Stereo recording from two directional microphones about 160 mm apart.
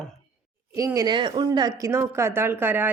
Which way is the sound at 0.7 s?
20° right (ahead or behind).